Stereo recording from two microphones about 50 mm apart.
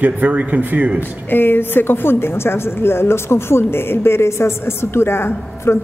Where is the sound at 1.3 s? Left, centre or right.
Left.